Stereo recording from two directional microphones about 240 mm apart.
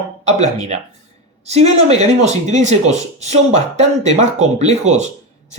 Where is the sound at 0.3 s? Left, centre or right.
Right.